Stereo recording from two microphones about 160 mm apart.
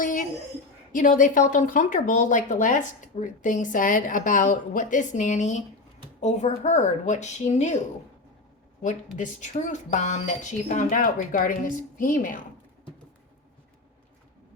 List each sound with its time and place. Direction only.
0.0 s a sound: 55° left (ahead or behind)
0.9 s speech: 55° left (ahead or behind)
8.8 s speech: 50° left (ahead or behind)